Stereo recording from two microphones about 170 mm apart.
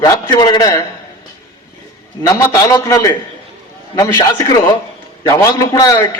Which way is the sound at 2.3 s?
20° left (ahead or behind).